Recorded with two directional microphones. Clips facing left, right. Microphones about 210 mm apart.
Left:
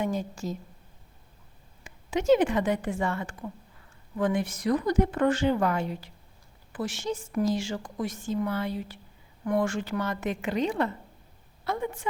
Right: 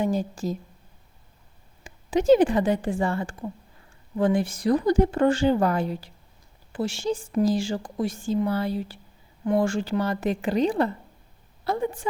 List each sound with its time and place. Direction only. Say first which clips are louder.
0.0 s a woman's voice: right 4 dB; 35° right (ahead or behind)
1.8 s a woman's voice: right 5 dB; 35° right (ahead or behind)